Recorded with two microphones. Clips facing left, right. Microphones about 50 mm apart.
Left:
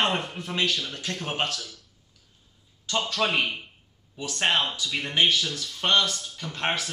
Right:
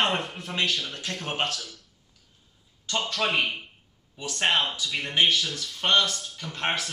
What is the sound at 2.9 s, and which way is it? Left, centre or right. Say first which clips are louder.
Speech: left 1 dB; centre.